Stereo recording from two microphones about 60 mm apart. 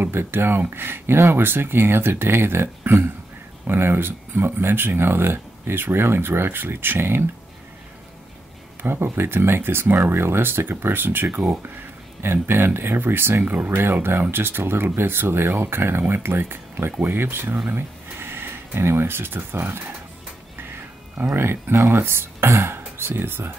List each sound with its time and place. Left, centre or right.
0.0 s speech: right
8.8 s speech: right
21.4 s speech: right